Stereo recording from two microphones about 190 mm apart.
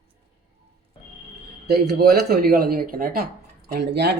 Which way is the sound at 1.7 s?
55° right (ahead or behind).